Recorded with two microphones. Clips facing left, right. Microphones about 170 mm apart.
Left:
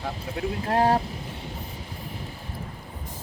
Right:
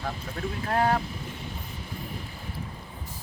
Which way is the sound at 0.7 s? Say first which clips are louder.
Left 3 dB; 35° left (ahead or behind).